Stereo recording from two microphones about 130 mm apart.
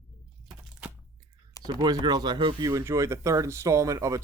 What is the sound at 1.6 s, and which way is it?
Speech, 30° right (ahead or behind).